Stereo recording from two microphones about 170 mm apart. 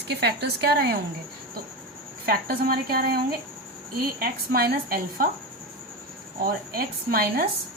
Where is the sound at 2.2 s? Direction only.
65° right (ahead or behind).